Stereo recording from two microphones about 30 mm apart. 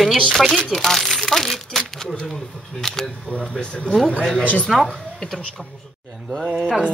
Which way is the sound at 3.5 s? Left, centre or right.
Centre.